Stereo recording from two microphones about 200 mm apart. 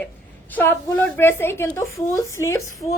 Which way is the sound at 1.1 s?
10° left (ahead or behind).